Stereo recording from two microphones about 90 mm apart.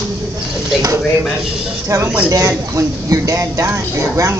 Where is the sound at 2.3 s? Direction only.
35° right (ahead or behind).